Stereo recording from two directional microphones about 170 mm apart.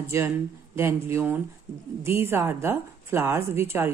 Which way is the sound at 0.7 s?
15° right (ahead or behind).